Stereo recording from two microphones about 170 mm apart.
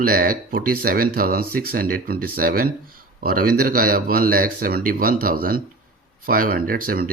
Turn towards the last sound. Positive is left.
turn(degrees=-60)  # may be behind; listen again after turning